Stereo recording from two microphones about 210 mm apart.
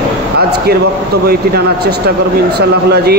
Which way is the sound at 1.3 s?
50° right (ahead or behind).